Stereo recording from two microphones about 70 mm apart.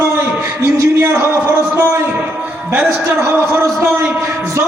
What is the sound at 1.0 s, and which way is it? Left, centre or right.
Speech, right.